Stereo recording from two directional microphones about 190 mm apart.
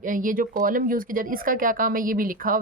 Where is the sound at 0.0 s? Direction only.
45° right (ahead or behind).